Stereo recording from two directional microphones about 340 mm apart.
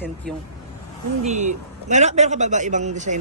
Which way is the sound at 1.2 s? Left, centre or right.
Centre.